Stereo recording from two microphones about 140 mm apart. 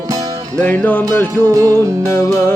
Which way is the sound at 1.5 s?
25° right (ahead or behind).